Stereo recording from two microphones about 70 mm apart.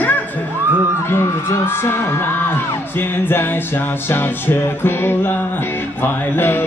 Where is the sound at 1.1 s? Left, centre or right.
Left.